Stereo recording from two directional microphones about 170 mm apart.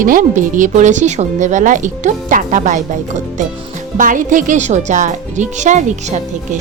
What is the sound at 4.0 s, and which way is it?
A woman's voice, 50° right (ahead or behind).